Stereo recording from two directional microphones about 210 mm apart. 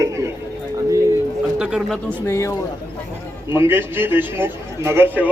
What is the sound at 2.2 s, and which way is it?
Speech, 15° left (ahead or behind).